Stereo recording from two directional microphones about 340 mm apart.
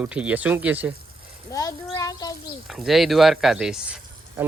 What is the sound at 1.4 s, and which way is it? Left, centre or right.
Child singing, centre.